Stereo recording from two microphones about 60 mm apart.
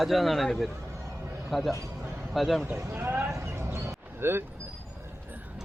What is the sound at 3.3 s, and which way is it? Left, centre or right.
Vehicle, right.